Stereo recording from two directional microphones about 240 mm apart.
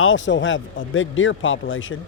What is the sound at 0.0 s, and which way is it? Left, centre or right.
A man's voice, left.